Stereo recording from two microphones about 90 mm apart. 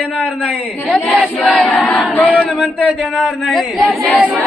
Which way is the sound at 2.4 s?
15° right (ahead or behind).